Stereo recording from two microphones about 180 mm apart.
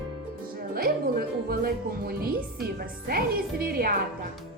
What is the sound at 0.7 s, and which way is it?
Music, 55° right (ahead or behind).